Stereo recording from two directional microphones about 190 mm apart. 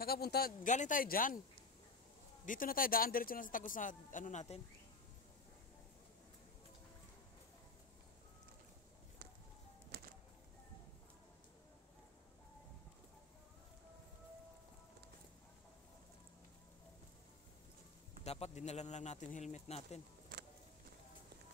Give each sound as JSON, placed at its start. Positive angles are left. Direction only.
{"t": 0.0, "sound": "speech", "side_deg": 55}
{"t": 0.7, "sound": "a man's voice", "side_deg": 40}
{"t": 2.4, "sound": "a man's voice", "side_deg": 45}
{"t": 9.9, "sound": "music", "side_deg": -55}
{"t": 18.2, "sound": "speech", "side_deg": 35}